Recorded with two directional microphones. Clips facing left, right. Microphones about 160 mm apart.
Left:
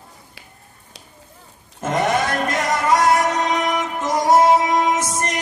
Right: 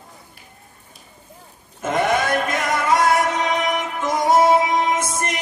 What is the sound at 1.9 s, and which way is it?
Music, 55° right (ahead or behind).